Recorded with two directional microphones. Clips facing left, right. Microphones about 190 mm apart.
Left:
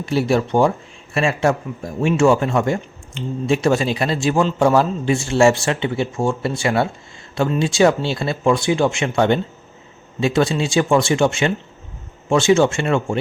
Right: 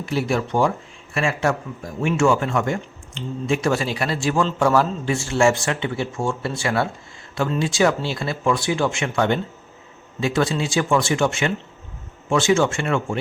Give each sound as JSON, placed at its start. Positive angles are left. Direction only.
{"t": 0.0, "sound": "a man's voice", "side_deg": 30}